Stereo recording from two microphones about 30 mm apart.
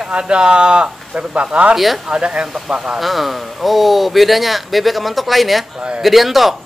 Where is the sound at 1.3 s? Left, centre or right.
Right.